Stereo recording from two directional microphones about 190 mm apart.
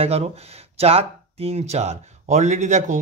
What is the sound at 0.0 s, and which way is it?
Speech, 30° right (ahead or behind).